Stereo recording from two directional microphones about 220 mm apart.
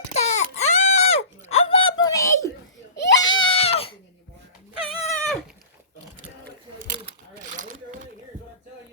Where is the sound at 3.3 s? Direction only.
25° left (ahead or behind).